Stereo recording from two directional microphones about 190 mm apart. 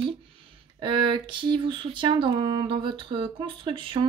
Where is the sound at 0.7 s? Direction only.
25° right (ahead or behind).